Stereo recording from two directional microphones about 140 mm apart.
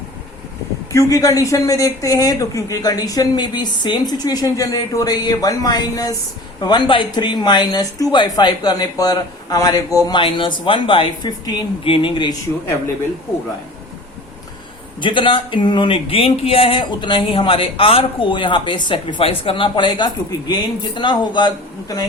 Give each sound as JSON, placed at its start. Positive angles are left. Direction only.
{"t": 0.9, "sound": "speech", "side_deg": 25}
{"t": 15.0, "sound": "speech", "side_deg": 35}